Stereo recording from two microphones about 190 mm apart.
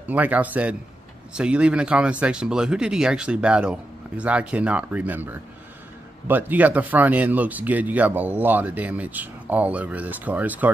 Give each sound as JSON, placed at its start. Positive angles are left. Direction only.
{"t": 0.1, "sound": "speech", "side_deg": -10}